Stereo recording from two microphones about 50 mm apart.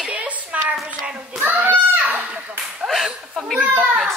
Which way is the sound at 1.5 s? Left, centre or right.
Right.